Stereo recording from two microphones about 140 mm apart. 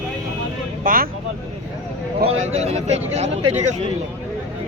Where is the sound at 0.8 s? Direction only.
90° right.